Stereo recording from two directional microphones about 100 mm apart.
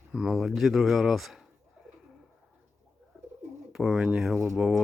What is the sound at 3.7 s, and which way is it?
Speech, 5° right (ahead or behind).